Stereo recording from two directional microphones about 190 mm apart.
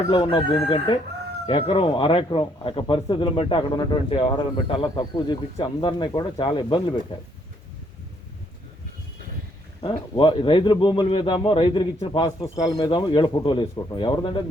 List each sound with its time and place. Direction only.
0.1 s speech: 25° left (ahead or behind)
1.5 s speech: 30° left (ahead or behind)
10.2 s speech: 30° left (ahead or behind)